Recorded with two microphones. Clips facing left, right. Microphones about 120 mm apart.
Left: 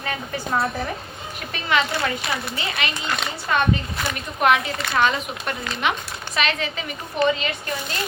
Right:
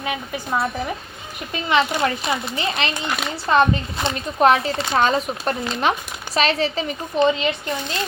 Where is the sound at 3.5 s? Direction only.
30° right (ahead or behind).